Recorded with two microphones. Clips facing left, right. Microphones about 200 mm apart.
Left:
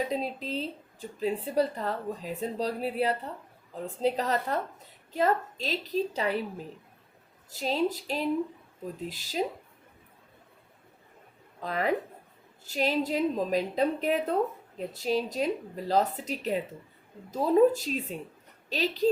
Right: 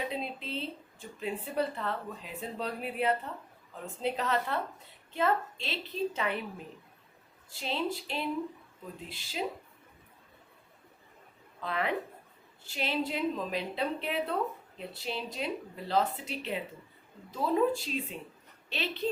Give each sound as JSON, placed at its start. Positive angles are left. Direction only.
{"t": 0.1, "sound": "speech", "side_deg": 40}
{"t": 7.5, "sound": "speech", "side_deg": 40}
{"t": 11.6, "sound": "speech", "side_deg": 40}